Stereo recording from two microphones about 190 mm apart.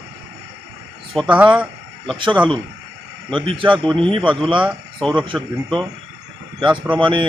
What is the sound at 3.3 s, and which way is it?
Speech, 25° right (ahead or behind).